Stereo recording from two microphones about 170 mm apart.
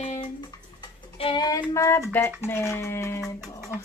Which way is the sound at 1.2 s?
25° left (ahead or behind).